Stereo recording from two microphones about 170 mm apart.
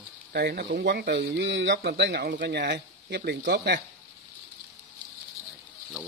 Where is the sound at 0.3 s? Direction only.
75° right (ahead or behind).